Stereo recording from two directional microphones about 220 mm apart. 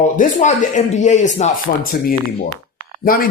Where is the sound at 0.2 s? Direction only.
35° left (ahead or behind).